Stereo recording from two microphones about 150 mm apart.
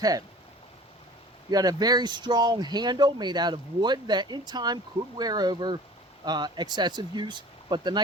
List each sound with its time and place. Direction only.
0.0 s speech: 25° right (ahead or behind)
1.5 s speech: 25° right (ahead or behind)